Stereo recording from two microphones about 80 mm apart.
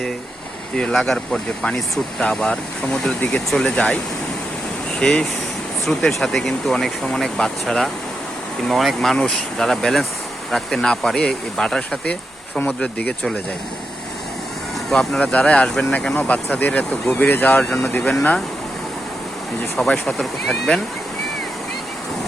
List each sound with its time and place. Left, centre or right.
0.8 s speech: centre
14.8 s speech: centre
15.2 s speech: centre
18.0 s speech: centre
19.9 s speech: centre